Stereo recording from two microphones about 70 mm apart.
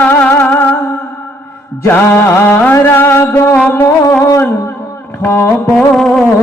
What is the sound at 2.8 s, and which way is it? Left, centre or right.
Music, left.